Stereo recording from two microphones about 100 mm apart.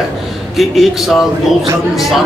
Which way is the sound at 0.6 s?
Centre (ahead or behind).